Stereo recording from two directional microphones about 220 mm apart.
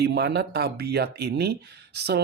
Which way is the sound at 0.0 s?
50° right (ahead or behind).